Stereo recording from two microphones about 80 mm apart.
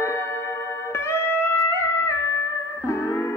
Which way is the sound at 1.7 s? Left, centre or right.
Left.